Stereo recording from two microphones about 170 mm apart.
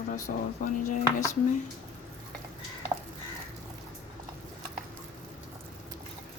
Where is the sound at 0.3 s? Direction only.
55° left (ahead or behind).